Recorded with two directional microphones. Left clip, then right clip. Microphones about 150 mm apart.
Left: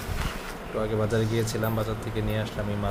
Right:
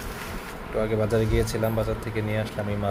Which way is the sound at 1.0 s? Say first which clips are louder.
Right 3 dB; 10° right (ahead or behind).